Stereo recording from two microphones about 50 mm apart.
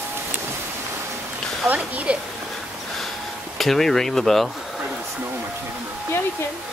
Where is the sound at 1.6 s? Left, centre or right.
Right.